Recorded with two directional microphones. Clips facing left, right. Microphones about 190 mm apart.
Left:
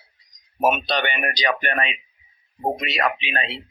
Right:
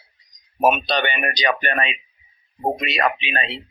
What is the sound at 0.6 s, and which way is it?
Speech, 20° right (ahead or behind).